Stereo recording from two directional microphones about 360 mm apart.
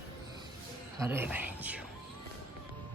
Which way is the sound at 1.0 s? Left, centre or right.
Centre.